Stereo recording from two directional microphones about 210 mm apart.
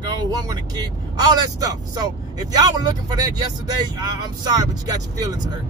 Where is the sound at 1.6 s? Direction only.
15° right (ahead or behind).